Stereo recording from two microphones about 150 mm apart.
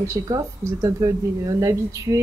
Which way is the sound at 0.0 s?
20° right (ahead or behind).